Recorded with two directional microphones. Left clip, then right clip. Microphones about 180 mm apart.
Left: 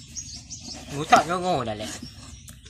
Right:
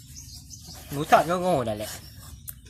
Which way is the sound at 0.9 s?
30° right (ahead or behind).